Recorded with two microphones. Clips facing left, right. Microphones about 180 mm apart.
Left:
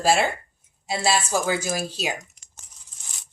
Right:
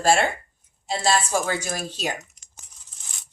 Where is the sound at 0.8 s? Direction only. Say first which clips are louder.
Right 1 dB; 5° left (ahead or behind).